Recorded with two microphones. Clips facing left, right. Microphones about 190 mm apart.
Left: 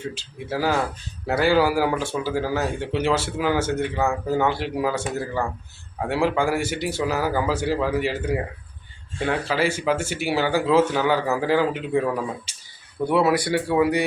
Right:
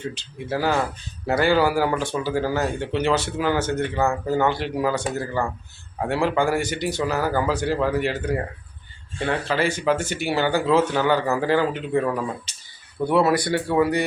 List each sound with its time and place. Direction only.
0.0 s speech: 5° left (ahead or behind)